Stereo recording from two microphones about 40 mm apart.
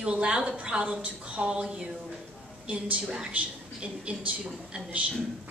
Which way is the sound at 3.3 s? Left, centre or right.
Right.